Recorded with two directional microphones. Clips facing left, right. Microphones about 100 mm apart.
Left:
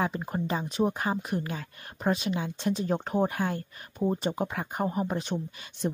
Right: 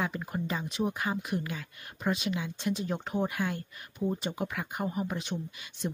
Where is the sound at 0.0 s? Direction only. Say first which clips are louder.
Left 3 dB; 35° left (ahead or behind).